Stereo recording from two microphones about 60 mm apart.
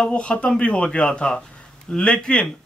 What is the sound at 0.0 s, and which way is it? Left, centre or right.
A man's voice, centre.